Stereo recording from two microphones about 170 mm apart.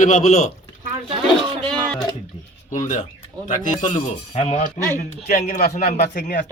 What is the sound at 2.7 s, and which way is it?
Speech, 50° left (ahead or behind).